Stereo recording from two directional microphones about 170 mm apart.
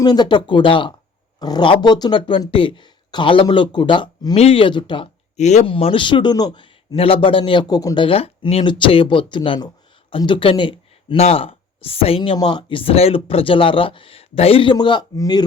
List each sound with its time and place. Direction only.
0.0 s speech: 25° left (ahead or behind)
5.4 s speech: 45° left (ahead or behind); by 15.4 s 25° left (ahead or behind)